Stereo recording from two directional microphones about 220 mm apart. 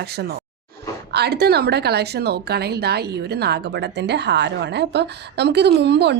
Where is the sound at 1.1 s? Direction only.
50° right (ahead or behind).